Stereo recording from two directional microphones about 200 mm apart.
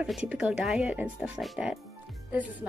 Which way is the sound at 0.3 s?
5° right (ahead or behind).